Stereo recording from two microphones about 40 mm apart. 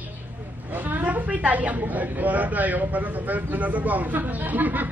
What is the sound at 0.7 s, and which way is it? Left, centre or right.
Vehicle, right.